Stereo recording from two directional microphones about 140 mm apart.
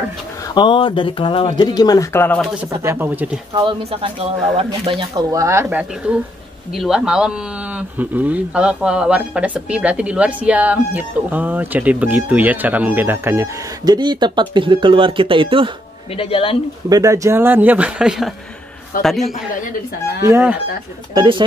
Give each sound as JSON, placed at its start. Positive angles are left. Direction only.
{"t": 0.6, "sound": "speech", "side_deg": 35}
{"t": 2.7, "sound": "speech", "side_deg": -20}
{"t": 3.5, "sound": "speech", "side_deg": -35}
{"t": 5.3, "sound": "speech", "side_deg": -20}
{"t": 13.9, "sound": "speech", "side_deg": -35}
{"t": 16.2, "sound": "speech", "side_deg": 45}
{"t": 16.9, "sound": "a man's voice", "side_deg": -25}
{"t": 20.2, "sound": "speech", "side_deg": -15}
{"t": 21.1, "sound": "speech", "side_deg": -35}